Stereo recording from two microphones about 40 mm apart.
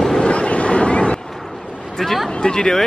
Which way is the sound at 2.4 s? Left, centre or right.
Centre.